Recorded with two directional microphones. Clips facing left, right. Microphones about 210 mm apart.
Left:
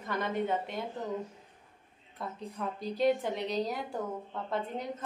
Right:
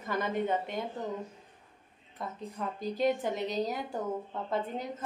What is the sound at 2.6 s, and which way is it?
A woman's voice, 5° right (ahead or behind).